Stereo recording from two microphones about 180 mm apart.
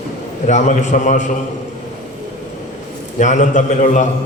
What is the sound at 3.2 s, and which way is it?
Speech, 40° left (ahead or behind).